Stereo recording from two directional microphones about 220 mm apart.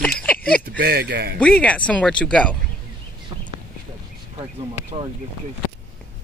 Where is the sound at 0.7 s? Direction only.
45° right (ahead or behind).